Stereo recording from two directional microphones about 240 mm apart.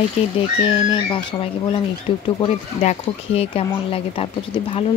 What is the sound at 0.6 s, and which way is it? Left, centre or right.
Speech, left.